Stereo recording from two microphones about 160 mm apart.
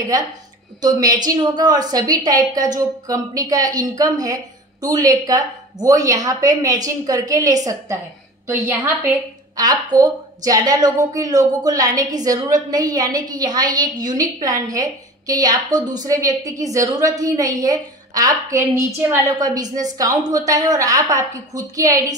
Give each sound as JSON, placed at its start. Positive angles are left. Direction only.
{"t": 0.7, "sound": "a woman's voice", "side_deg": -25}